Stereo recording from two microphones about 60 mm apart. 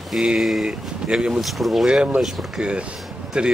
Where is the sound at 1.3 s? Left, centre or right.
Centre.